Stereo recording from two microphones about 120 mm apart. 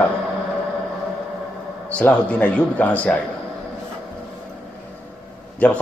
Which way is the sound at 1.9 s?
10° left (ahead or behind).